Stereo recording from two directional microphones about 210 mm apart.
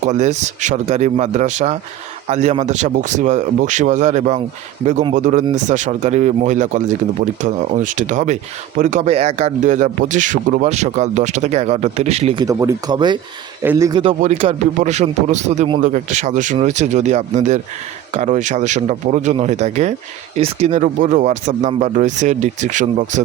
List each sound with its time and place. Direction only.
0.0 s speech: 35° right (ahead or behind); by 14.0 s 15° right (ahead or behind)
14.0 s speech: 30° right (ahead or behind)